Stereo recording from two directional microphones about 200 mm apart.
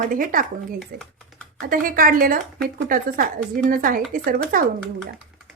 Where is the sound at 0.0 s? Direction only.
40° right (ahead or behind).